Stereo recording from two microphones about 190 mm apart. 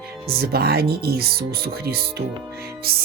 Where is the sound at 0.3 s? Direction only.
55° right (ahead or behind).